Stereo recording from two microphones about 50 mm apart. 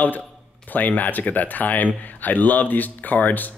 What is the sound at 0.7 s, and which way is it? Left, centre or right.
Speech, left.